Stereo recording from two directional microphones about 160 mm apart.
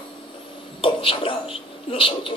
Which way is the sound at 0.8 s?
35° left (ahead or behind).